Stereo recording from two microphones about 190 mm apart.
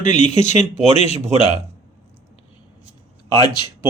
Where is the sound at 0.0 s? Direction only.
40° left (ahead or behind).